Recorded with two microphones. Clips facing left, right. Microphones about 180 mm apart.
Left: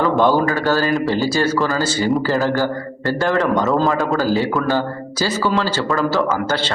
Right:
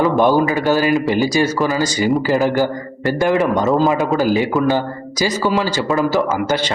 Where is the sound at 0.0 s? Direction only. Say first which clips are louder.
Right 2 dB; 15° right (ahead or behind).